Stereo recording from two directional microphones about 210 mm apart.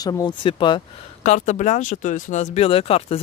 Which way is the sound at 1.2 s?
35° left (ahead or behind).